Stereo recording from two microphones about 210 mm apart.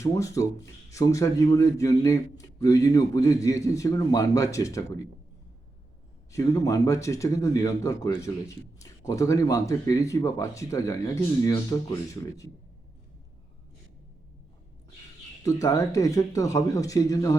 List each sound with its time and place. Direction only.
0.0 s a man's voice: 15° left (ahead or behind)
6.3 s a man's voice: 15° left (ahead or behind)
15.4 s a man's voice: 15° left (ahead or behind)